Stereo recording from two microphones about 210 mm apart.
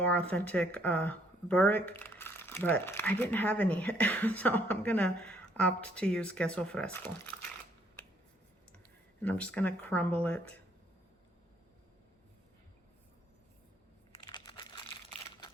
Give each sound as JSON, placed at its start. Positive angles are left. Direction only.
{"t": 0.0, "sound": "speech", "side_deg": 5}
{"t": 9.2, "sound": "speech", "side_deg": 5}
{"t": 14.3, "sound": "crumpling", "side_deg": 20}